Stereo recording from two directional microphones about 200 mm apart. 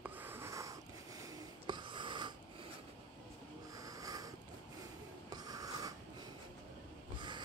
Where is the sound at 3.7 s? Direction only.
15° right (ahead or behind).